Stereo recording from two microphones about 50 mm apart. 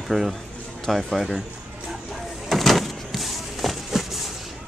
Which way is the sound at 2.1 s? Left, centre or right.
Centre.